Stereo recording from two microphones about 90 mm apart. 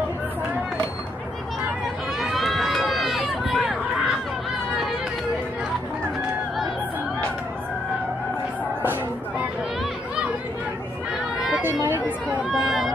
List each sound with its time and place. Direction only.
2.2 s run: centre (ahead or behind)
11.9 s chatter: 15° right (ahead or behind)
12.4 s a sound: centre (ahead or behind)